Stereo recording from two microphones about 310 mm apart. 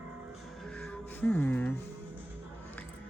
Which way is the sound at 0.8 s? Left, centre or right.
Centre.